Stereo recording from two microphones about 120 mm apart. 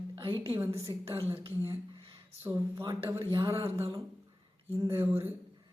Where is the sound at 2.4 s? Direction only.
20° right (ahead or behind).